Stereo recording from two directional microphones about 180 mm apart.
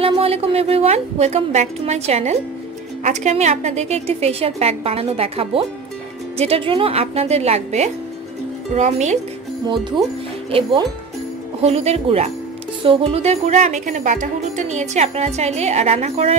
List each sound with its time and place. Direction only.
0.0 s a woman's voice: 35° right (ahead or behind)
10.5 s a woman's voice: 30° right (ahead or behind)